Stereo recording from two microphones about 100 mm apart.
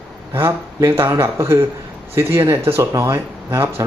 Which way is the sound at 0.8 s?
30° right (ahead or behind).